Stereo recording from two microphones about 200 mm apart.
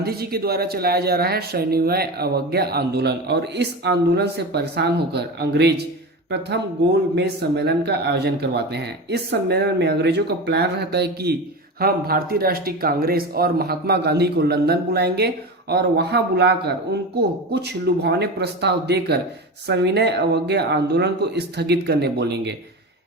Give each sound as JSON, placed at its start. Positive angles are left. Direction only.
{"t": 0.0, "sound": "speech", "side_deg": -50}
{"t": 7.2, "sound": "speech", "side_deg": -55}